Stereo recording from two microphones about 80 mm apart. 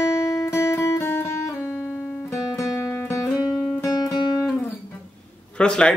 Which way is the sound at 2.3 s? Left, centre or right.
Left.